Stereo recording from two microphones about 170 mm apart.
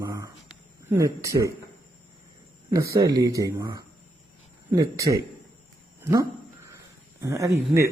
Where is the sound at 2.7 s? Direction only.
20° right (ahead or behind).